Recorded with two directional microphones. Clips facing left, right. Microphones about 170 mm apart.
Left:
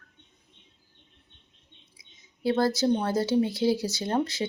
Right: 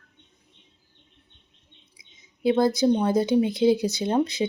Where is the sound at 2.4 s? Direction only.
20° right (ahead or behind).